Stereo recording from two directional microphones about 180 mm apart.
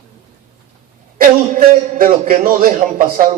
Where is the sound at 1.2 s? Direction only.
50° right (ahead or behind).